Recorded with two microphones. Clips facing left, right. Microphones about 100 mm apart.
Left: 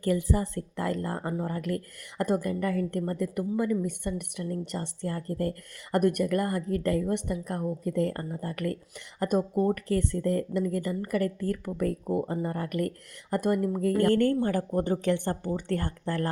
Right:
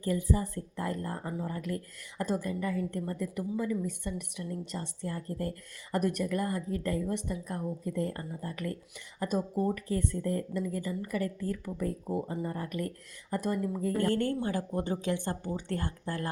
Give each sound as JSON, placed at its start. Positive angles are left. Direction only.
{"t": 0.0, "sound": "a woman's voice", "side_deg": 70}